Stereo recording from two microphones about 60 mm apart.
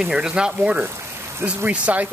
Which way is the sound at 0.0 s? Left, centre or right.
Centre.